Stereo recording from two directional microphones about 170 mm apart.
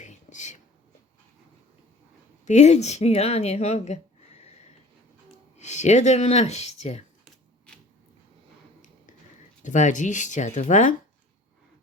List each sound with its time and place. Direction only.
0.0 s whispering: 45° left (ahead or behind)
2.4 s a woman's voice: 45° left (ahead or behind)
5.5 s speech: 45° left (ahead or behind)
9.6 s speech: 45° left (ahead or behind)